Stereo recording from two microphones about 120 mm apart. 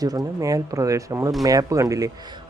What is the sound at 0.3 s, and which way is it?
Speech, 30° right (ahead or behind).